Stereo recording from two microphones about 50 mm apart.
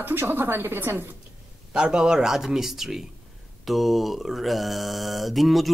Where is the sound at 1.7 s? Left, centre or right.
Centre.